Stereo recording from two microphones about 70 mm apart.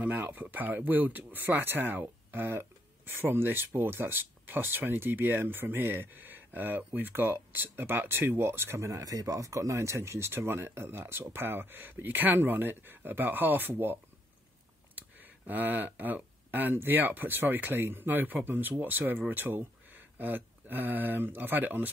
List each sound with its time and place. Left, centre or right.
0.3 s speech: right
15.0 s speech: right